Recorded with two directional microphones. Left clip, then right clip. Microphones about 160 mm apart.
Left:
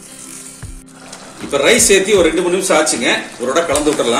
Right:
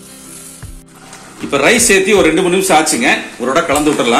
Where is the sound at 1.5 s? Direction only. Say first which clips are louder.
Right 1 dB; 50° right (ahead or behind).